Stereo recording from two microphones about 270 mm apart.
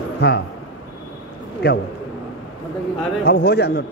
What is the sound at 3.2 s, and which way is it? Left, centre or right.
Speech, left.